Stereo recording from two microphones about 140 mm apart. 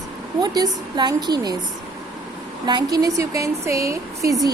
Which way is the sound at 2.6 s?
30° right (ahead or behind).